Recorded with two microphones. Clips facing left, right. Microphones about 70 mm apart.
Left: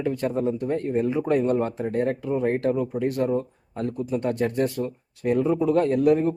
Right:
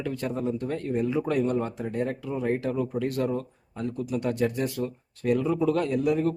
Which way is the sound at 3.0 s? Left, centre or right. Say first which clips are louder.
Left 4 dB; left.